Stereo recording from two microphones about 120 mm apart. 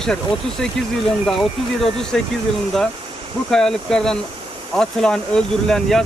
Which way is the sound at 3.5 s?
5° left (ahead or behind).